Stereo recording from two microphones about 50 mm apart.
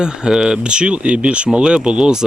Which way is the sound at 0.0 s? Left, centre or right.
Centre.